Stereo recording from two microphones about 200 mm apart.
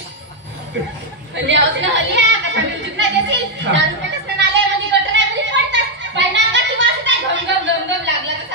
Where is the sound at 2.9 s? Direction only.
65° right (ahead or behind).